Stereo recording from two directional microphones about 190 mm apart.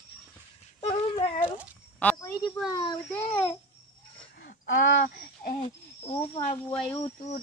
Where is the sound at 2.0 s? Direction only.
5° left (ahead or behind).